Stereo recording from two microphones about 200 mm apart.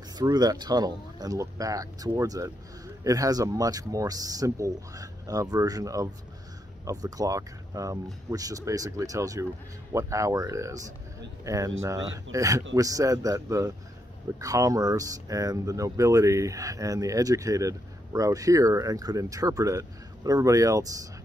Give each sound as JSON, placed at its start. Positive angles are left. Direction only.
{"t": 0.2, "sound": "speech", "side_deg": -20}